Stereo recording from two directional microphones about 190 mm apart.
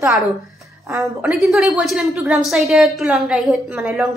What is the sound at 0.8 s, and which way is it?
Speech, 15° right (ahead or behind).